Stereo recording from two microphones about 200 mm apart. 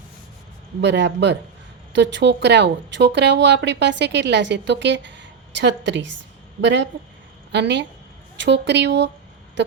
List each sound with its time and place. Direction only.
0.8 s speech: 60° right (ahead or behind)